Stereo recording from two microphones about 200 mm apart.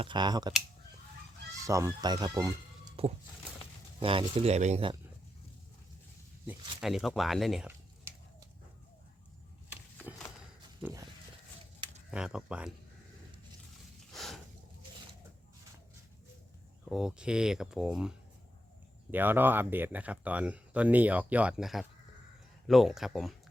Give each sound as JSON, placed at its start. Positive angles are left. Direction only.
{"t": 0.0, "sound": "speech", "side_deg": -20}
{"t": 1.5, "sound": "speech", "side_deg": -15}
{"t": 3.0, "sound": "speech", "side_deg": -30}
{"t": 6.7, "sound": "a sound", "side_deg": 0}
{"t": 12.1, "sound": "speech", "side_deg": -5}
{"t": 14.1, "sound": "a sound", "side_deg": 0}
{"t": 16.9, "sound": "speech", "side_deg": -5}
{"t": 19.1, "sound": "speech", "side_deg": -10}